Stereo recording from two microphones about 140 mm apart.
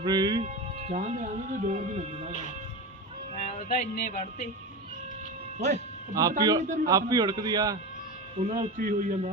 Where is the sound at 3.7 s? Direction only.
55° left (ahead or behind).